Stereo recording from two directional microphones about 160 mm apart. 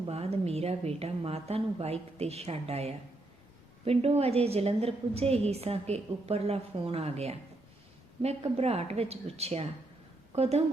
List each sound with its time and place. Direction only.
0.1 s a woman's voice: 40° right (ahead or behind)